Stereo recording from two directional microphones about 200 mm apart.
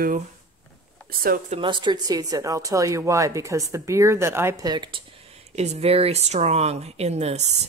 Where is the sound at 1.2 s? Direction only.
45° right (ahead or behind).